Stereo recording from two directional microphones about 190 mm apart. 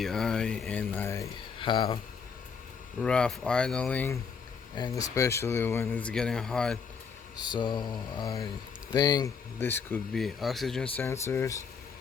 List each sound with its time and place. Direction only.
0.0 s speech: 5° left (ahead or behind); by 2.0 s 25° left (ahead or behind)
3.0 s speech: 5° left (ahead or behind)
7.4 s mantra: 20° left (ahead or behind)
8.9 s speech: 20° left (ahead or behind)
10.1 s speech: centre (ahead or behind)
10.9 s speech: 15° left (ahead or behind)